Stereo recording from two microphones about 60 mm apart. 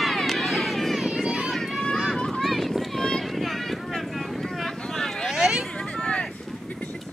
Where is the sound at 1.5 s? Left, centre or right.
Centre.